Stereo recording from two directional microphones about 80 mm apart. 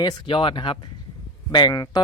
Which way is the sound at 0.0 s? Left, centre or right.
Left.